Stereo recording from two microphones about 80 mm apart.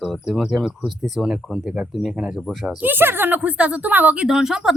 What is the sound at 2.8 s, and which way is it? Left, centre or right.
A woman's voice, right.